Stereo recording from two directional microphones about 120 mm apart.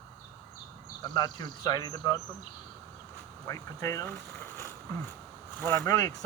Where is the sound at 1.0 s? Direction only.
35° left (ahead or behind).